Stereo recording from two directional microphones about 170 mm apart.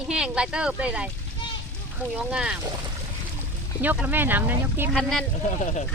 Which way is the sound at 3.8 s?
10° right (ahead or behind).